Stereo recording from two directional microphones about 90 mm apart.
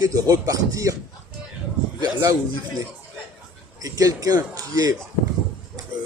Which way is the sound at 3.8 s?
40° right (ahead or behind).